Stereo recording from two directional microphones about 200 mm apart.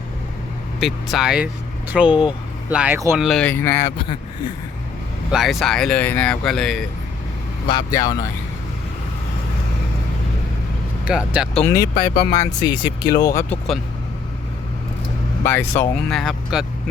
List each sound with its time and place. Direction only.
0.8 s speech: centre (ahead or behind)
3.2 s speech: centre (ahead or behind)
5.3 s speech: centre (ahead or behind)
7.7 s speech: 20° left (ahead or behind)
11.0 s speech: 5° right (ahead or behind)
11.6 s speech: 15° left (ahead or behind)
12.3 s speech: 40° left (ahead or behind)
12.8 s speech: 20° left (ahead or behind)
15.4 s speech: 10° left (ahead or behind)